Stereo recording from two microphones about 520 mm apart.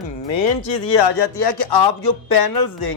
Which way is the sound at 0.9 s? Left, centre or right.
Left.